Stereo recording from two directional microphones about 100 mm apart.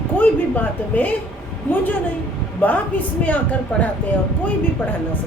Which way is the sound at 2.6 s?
15° left (ahead or behind).